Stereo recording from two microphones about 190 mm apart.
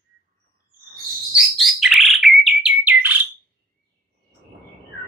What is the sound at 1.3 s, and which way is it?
Bird, centre (ahead or behind).